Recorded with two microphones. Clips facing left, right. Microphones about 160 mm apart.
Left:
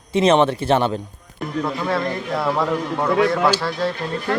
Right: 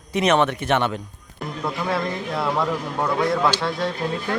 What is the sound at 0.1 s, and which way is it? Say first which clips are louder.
Speech: left 4 dB; 30° left (ahead or behind).